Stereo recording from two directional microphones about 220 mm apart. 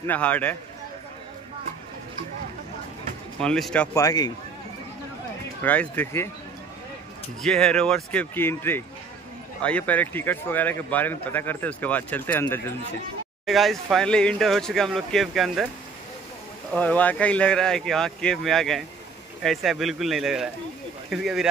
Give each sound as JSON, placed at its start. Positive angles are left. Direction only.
{"t": 0.0, "sound": "speech", "side_deg": 5}
{"t": 3.3, "sound": "speech", "side_deg": 0}
{"t": 5.6, "sound": "speech", "side_deg": 10}
{"t": 7.4, "sound": "speech", "side_deg": 5}
{"t": 16.7, "sound": "speech", "side_deg": 5}